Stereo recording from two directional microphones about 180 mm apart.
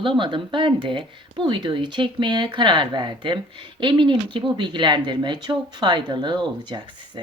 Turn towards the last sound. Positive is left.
turn(degrees=-25)  # may be behind; listen again after turning